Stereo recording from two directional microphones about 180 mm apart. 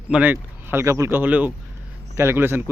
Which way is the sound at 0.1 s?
10° right (ahead or behind).